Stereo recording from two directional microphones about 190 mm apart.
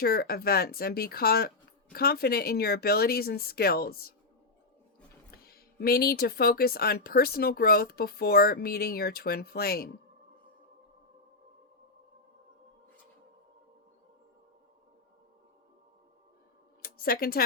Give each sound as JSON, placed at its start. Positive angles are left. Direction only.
{"t": 0.0, "sound": "speech", "side_deg": 55}
{"t": 5.3, "sound": "speech", "side_deg": 55}
{"t": 16.8, "sound": "a sound", "side_deg": 50}